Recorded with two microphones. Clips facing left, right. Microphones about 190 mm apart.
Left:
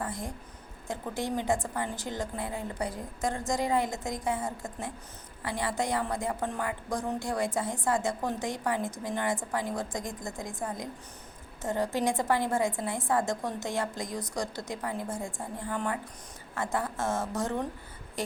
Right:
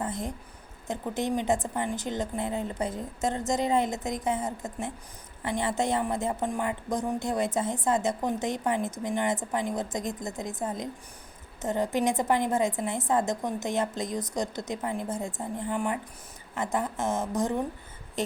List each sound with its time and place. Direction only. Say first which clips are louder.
0.0 s a woman's voice: right 3 dB; 20° right (ahead or behind)